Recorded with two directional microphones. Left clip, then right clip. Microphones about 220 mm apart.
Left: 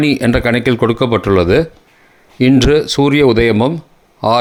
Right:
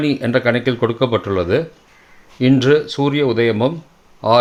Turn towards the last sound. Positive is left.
turn(degrees=30)  # may be behind; listen again after turning